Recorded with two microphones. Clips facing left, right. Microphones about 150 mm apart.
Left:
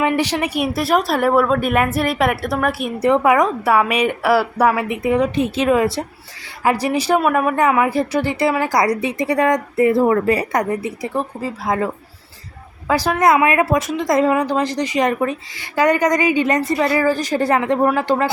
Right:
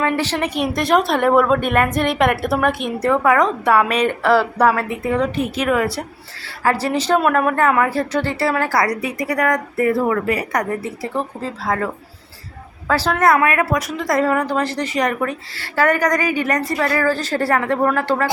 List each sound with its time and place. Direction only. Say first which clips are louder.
0.0 s a woman's voice: left 1 dB; 15° left (ahead or behind)
12.9 s a woman's voice: left 1 dB; 15° left (ahead or behind)